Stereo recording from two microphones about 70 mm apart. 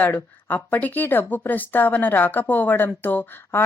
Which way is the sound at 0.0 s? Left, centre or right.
Left.